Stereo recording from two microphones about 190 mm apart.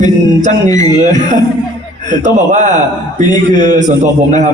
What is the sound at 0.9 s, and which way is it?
A man's voice, 40° right (ahead or behind).